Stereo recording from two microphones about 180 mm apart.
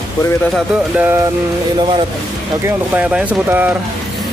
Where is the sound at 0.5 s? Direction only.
10° right (ahead or behind).